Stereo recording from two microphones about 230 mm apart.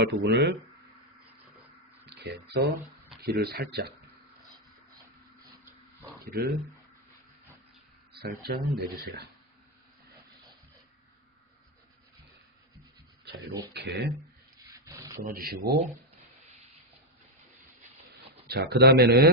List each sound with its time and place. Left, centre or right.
0.0 s speech: right
2.0 s speech: right
6.2 s speech: right
8.1 s speech: right
13.7 s speech: right
14.7 s rub: centre
15.2 s speech: right
18.5 s speech: right